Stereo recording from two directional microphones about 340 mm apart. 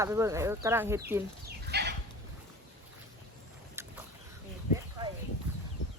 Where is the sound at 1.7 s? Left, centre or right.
Right.